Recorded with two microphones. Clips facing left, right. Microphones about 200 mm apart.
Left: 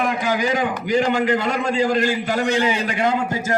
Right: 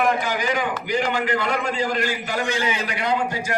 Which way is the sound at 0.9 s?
40° left (ahead or behind).